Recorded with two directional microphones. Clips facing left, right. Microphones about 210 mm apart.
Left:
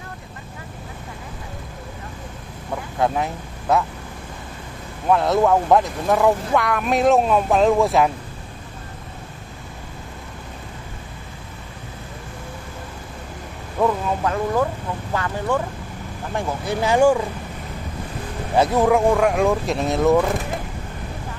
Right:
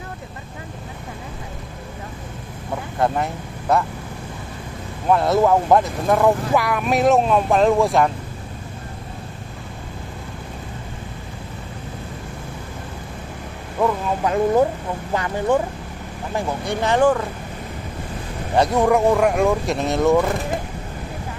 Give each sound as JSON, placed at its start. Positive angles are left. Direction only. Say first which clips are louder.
{"t": 3.0, "sound": "speech", "louder": "even", "side_deg": 0}
{"t": 5.1, "sound": "speech", "louder": "right 1 dB", "side_deg": -5}
{"t": 14.2, "sound": "speech", "louder": "right 5 dB", "side_deg": -20}
{"t": 16.3, "sound": "speech", "louder": "even", "side_deg": 0}
{"t": 18.6, "sound": "speech", "louder": "even", "side_deg": 0}